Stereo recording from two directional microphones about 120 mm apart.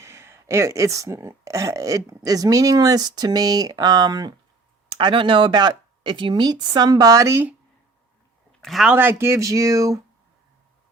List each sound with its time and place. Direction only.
0.0 s speech: 25° right (ahead or behind)
8.6 s speech: centre (ahead or behind)
8.9 s speech: 15° right (ahead or behind)